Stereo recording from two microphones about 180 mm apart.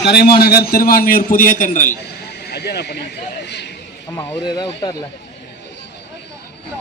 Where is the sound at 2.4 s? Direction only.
65° left (ahead or behind).